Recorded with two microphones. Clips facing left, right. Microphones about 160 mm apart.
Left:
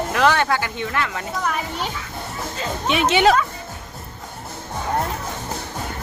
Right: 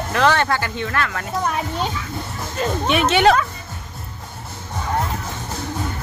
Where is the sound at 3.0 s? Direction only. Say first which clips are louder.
Right 1 dB; 10° left (ahead or behind).